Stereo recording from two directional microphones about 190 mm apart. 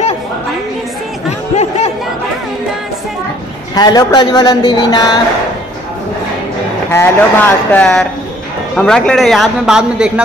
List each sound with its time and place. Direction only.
3.7 s speech: 20° left (ahead or behind)
6.9 s a man's voice: 10° left (ahead or behind); by 10.2 s 5° right (ahead or behind)